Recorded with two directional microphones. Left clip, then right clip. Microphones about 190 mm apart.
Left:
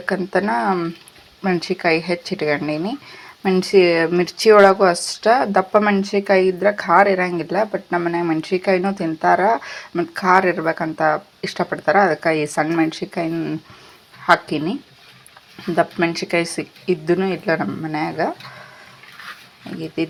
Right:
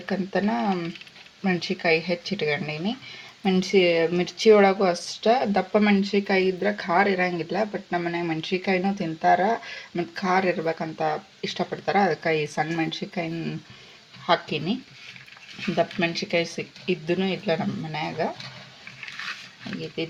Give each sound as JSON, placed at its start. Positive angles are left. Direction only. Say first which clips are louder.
{"t": 0.0, "sound": "speech", "louder": "left 7 dB", "side_deg": 15}